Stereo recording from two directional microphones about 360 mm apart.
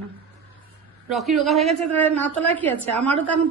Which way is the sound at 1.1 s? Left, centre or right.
Centre.